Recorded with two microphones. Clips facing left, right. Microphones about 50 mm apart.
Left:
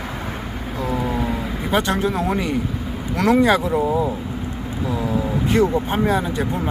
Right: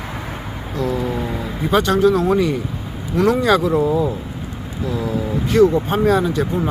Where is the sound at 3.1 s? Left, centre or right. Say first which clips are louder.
Right 1 dB; left.